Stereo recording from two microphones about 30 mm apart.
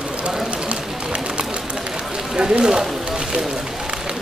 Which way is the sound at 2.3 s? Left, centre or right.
Right.